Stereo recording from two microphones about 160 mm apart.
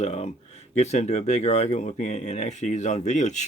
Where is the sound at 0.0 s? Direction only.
45° left (ahead or behind).